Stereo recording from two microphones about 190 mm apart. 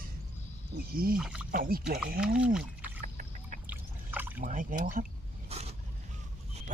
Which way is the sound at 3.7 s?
10° right (ahead or behind).